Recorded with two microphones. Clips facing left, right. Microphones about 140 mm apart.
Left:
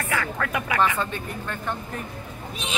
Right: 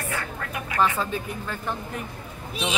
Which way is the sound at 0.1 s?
90° left.